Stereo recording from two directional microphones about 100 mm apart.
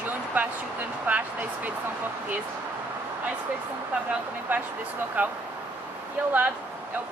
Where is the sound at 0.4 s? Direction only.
15° right (ahead or behind).